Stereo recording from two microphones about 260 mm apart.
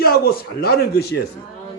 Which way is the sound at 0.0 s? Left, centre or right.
Left.